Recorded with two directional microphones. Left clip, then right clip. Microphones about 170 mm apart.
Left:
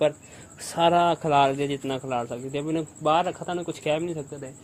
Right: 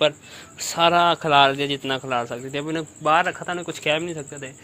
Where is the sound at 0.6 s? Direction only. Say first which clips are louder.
Right 3 dB; 20° left (ahead or behind); by 4.5 s centre (ahead or behind).